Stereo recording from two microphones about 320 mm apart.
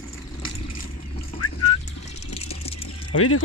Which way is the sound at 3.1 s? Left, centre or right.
Left.